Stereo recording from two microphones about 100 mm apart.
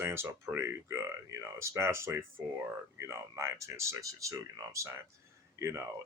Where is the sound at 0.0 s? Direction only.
25° right (ahead or behind).